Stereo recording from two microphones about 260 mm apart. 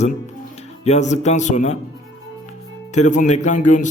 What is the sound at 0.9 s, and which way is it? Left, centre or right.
Speech, left.